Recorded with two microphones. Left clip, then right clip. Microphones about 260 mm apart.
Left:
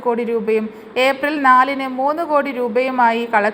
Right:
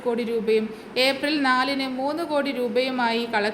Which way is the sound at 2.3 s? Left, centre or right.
Centre.